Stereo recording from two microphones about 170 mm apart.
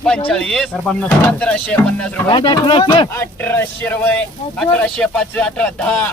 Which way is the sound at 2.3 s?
30° left (ahead or behind).